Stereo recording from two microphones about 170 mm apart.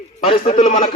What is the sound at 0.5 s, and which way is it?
Speech, 50° left (ahead or behind).